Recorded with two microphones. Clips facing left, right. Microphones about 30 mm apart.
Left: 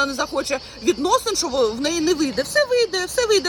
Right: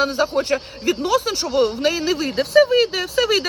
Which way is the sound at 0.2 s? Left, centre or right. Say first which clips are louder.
Right 4 dB; right.